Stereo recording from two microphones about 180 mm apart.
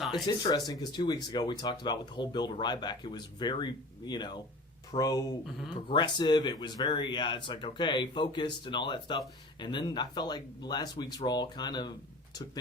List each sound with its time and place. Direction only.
0.1 s speech: 20° left (ahead or behind)